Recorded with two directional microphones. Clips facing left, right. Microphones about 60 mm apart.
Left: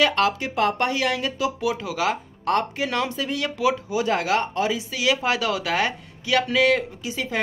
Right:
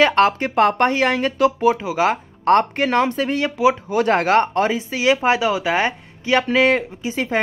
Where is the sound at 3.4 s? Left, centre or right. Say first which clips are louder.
Right 5 dB; right.